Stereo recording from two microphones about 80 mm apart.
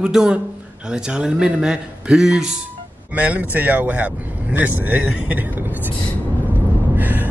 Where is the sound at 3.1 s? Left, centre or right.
Centre.